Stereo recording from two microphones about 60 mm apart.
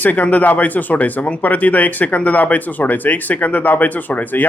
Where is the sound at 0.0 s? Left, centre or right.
Left.